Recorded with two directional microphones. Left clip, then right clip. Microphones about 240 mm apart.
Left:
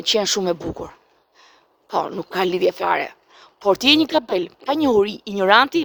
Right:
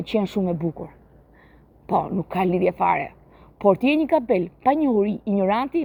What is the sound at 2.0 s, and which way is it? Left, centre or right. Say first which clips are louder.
Speech: left 3 dB; left.